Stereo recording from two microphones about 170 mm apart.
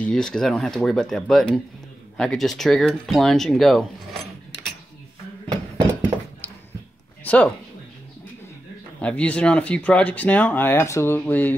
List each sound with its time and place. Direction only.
0.0 s speech: 5° left (ahead or behind)
5.8 s a sound: 20° right (ahead or behind)
7.2 s speech: 5° left (ahead or behind)
9.0 s speech: 5° left (ahead or behind)